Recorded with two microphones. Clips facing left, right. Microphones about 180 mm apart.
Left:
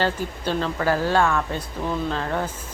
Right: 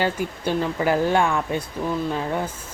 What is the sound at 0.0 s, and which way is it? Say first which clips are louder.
Speech: right 1 dB; 15° right (ahead or behind).